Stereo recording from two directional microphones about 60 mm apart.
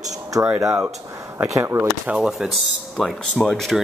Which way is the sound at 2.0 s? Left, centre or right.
Centre.